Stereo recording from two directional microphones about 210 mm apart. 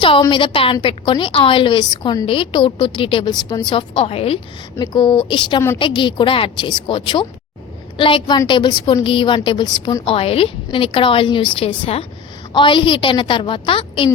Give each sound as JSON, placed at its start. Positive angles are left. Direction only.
{"t": 0.0, "sound": "a woman's voice", "side_deg": 20}